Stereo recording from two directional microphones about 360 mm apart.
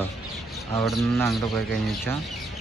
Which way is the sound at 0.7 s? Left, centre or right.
Centre.